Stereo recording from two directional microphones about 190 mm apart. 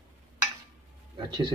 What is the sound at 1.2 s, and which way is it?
Speech, 25° right (ahead or behind).